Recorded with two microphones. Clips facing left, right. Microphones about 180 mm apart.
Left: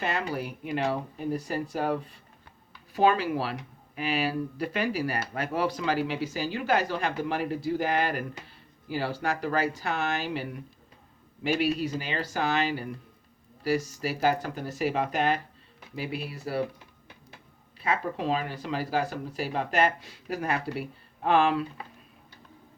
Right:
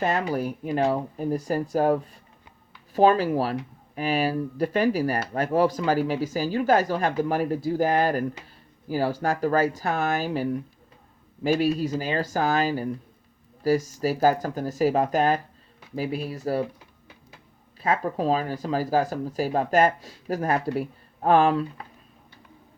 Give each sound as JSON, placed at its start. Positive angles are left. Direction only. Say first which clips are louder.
{"t": 0.0, "sound": "speech", "louder": "right 6 dB", "side_deg": -45}
{"t": 17.7, "sound": "speech", "louder": "right 4 dB", "side_deg": -45}